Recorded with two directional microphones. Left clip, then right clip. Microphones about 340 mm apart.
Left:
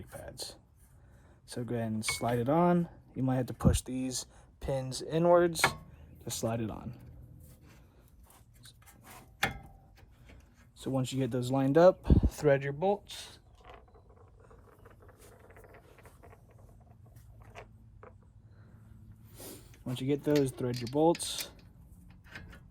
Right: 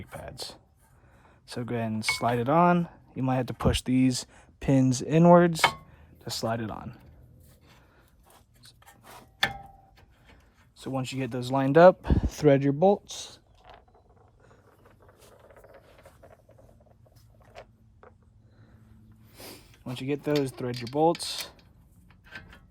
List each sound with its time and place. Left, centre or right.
0.0 s music: centre
1.5 s speech: centre
10.8 s speech: centre
14.8 s a sound: centre
19.3 s speech: centre
22.4 s a sound: centre